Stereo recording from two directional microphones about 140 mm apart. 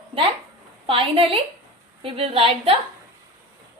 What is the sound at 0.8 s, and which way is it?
A woman's voice, 40° right (ahead or behind).